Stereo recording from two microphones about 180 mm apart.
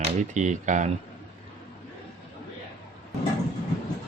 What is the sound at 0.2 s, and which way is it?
Speech, 40° right (ahead or behind).